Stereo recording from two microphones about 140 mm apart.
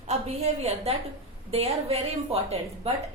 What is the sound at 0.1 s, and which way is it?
A woman's voice, 50° right (ahead or behind).